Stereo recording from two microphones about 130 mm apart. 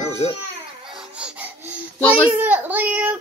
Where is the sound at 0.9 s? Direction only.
5° right (ahead or behind).